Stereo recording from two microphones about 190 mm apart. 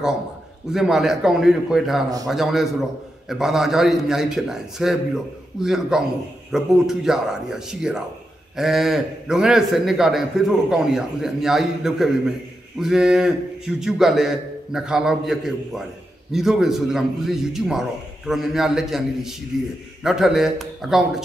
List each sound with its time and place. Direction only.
0.7 s a man's voice: centre (ahead or behind)